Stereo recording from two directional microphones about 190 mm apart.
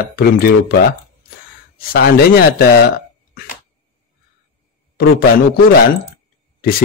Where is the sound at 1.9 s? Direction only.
55° left (ahead or behind).